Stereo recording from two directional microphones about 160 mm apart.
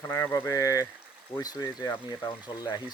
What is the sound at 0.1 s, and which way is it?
Speech, 15° left (ahead or behind).